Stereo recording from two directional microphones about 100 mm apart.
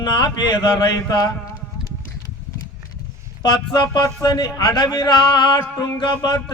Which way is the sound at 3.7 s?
40° left (ahead or behind).